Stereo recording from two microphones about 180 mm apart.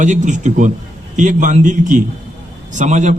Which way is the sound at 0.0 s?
45° right (ahead or behind).